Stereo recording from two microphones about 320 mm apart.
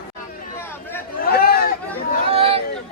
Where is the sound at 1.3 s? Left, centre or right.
Left.